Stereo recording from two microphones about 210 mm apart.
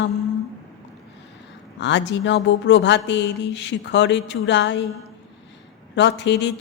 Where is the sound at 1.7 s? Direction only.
55° left (ahead or behind).